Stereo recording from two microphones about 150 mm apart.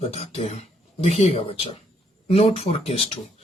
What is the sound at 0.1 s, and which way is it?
Speech, 45° left (ahead or behind).